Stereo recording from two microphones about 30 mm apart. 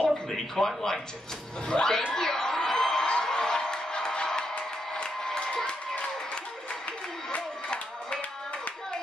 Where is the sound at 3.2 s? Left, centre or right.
Left.